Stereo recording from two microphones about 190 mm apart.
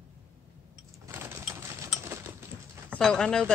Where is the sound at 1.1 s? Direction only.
15° right (ahead or behind).